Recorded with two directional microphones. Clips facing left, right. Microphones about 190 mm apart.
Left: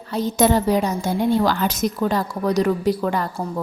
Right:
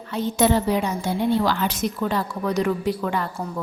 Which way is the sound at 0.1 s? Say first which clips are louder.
Left 2 dB; 40° left (ahead or behind).